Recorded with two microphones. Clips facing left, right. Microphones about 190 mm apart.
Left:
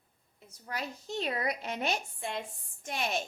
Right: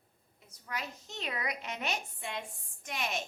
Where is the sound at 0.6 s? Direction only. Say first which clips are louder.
Left 3 dB; 35° left (ahead or behind).